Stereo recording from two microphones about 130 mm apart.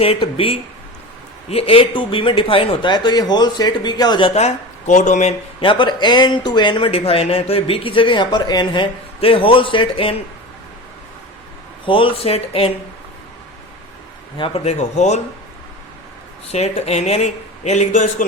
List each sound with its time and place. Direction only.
0.0 s speech: 45° left (ahead or behind)
4.4 s speech: 65° left (ahead or behind)
5.5 s speech: 40° left (ahead or behind)
11.9 s speech: 40° left (ahead or behind)
14.3 s speech: 45° left (ahead or behind); by 15.2 s 60° left (ahead or behind)
16.5 s speech: 55° left (ahead or behind); by 18.3 s 75° left (ahead or behind)